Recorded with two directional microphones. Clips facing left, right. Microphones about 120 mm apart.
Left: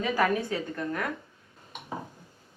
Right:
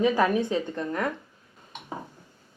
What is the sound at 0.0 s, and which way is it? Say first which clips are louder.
A woman's voice: right 4 dB; 20° right (ahead or behind).